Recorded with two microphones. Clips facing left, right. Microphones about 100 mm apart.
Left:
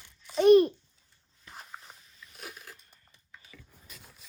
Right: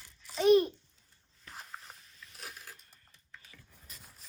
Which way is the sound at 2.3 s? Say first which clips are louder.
Left 3 dB; centre (ahead or behind).